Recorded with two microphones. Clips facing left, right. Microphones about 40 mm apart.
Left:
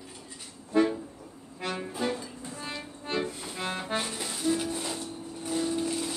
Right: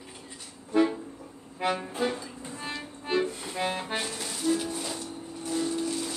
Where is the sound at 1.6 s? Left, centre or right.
Centre.